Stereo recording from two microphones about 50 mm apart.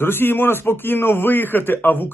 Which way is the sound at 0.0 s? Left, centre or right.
Left.